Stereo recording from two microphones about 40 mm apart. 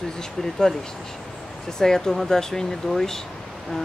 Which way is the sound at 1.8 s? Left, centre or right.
Centre.